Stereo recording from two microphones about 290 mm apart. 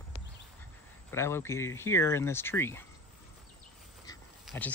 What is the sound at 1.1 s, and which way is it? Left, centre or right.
Speech, centre.